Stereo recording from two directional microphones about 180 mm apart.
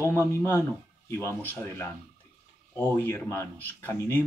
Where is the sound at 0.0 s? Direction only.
15° left (ahead or behind).